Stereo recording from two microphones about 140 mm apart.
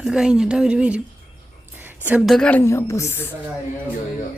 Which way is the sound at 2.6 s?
20° left (ahead or behind).